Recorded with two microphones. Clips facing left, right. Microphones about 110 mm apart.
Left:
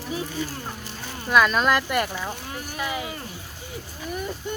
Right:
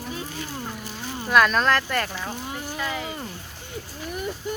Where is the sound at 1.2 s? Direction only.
Centre (ahead or behind).